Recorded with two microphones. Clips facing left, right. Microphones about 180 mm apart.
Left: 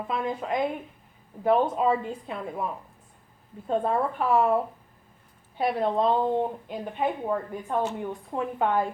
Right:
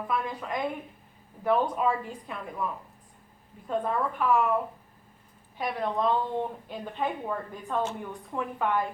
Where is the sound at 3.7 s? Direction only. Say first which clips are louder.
Left 3 dB; 30° left (ahead or behind).